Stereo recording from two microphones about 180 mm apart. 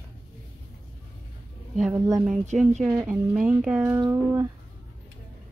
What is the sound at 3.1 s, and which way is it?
Speech, 5° right (ahead or behind).